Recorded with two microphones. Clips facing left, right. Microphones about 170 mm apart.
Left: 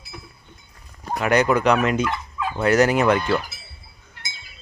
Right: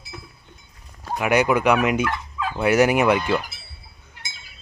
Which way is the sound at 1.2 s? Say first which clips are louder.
Even; 10° right (ahead or behind).